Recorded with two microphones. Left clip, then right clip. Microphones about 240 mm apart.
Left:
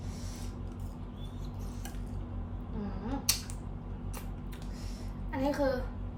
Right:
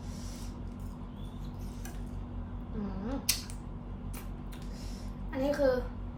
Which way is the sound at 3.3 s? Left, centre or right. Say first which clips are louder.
Left 1 dB; centre.